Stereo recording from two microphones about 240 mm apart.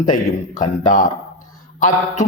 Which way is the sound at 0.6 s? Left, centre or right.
Left.